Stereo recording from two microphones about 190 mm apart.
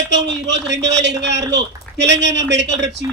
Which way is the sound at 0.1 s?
70° right (ahead or behind).